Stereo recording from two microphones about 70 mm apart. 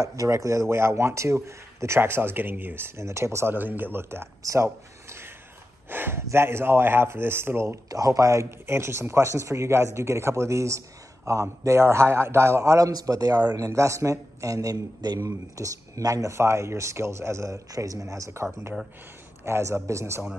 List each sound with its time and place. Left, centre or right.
0.0 s a man's voice: right
3.5 s a man's voice: right
4.4 s speech: right
5.9 s a man's voice: right
7.9 s speech: right
13.6 s speech: right
15.1 s speech: right
16.3 s a man's voice: right